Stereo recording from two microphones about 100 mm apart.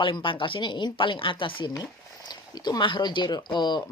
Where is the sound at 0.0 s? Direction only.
55° left (ahead or behind).